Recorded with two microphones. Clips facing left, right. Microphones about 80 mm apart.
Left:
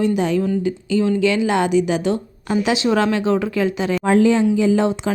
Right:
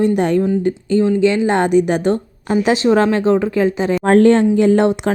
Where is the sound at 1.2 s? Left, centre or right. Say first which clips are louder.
Right 3 dB; right.